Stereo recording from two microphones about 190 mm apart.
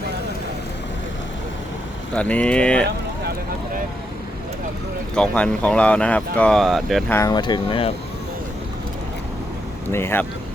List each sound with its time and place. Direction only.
2.1 s speech: 5° left (ahead or behind)
5.1 s speech: 5° left (ahead or behind)
7.1 s speech: 15° left (ahead or behind)
9.9 s speech: 10° left (ahead or behind)